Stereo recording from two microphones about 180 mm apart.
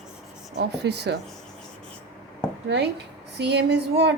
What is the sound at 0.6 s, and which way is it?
Speech, 70° right (ahead or behind).